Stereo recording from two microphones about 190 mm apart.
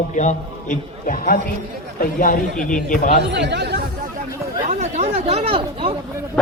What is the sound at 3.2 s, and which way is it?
Speech, 65° right (ahead or behind).